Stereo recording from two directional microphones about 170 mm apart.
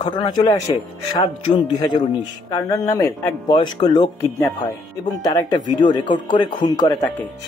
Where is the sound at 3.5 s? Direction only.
25° left (ahead or behind).